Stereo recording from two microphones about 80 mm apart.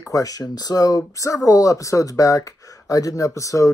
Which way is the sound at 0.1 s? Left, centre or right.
Left.